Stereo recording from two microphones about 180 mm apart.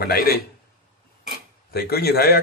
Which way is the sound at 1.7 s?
60° left (ahead or behind).